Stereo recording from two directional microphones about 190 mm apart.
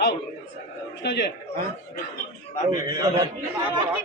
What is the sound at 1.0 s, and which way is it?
Speech, 60° left (ahead or behind).